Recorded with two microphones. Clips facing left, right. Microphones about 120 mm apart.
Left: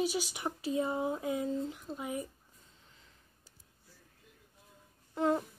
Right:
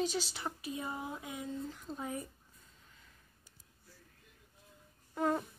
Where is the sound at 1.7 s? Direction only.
10° left (ahead or behind).